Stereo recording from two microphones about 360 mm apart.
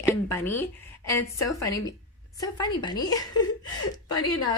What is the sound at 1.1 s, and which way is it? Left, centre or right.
A woman's voice, centre.